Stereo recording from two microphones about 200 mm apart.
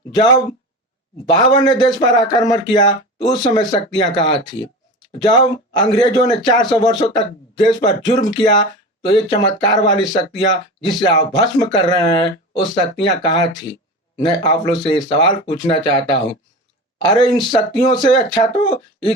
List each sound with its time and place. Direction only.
0.1 s speech: 20° left (ahead or behind)
1.5 s speech: 20° left (ahead or behind)
18.4 s speech: 35° left (ahead or behind)